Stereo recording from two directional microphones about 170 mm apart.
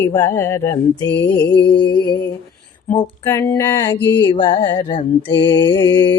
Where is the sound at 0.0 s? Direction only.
15° left (ahead or behind).